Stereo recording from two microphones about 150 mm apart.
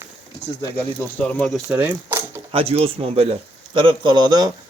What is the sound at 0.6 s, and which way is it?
Speech, 10° left (ahead or behind).